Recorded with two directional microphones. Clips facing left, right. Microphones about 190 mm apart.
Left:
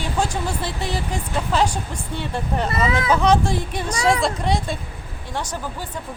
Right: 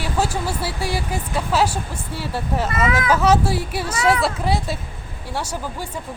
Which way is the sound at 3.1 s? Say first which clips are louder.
Even; 5° right (ahead or behind).